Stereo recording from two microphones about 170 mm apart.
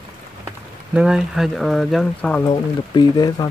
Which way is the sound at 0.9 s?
5° right (ahead or behind).